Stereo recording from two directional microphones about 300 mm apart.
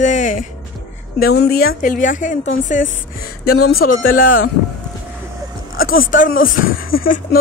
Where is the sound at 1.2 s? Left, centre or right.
Left.